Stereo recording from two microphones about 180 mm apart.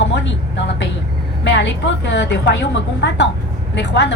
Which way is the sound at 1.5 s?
75° left (ahead or behind).